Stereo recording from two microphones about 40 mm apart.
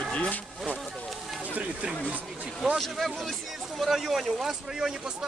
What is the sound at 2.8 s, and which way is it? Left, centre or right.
Speech, centre.